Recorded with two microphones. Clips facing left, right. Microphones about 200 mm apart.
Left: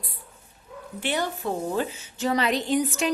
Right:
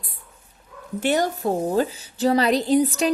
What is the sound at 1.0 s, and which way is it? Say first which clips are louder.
A woman's voice: right 6 dB; 40° right (ahead or behind).